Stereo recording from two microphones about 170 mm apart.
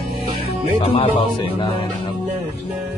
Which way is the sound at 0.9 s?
30° left (ahead or behind).